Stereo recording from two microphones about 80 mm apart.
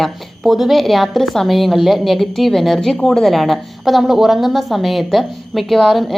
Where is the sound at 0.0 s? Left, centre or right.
Centre.